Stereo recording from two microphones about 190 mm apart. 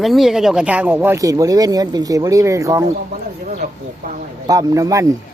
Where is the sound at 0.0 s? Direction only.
Centre (ahead or behind); by 2.8 s 15° right (ahead or behind).